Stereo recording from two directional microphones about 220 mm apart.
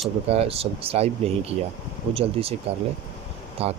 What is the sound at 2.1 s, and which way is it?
Speech, 25° right (ahead or behind).